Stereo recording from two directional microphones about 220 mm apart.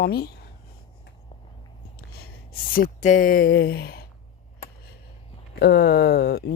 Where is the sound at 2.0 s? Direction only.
45° left (ahead or behind).